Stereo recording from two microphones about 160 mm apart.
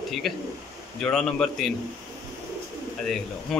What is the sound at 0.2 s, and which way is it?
A man's voice, centre (ahead or behind).